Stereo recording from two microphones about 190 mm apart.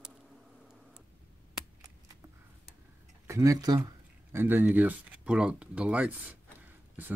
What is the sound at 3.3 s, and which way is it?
Speech, 15° right (ahead or behind).